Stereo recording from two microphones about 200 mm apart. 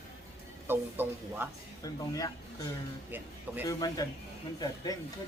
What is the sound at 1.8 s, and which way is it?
A man's voice, 20° left (ahead or behind).